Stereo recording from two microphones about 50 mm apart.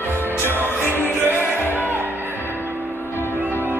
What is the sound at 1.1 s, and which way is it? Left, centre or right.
Music, right.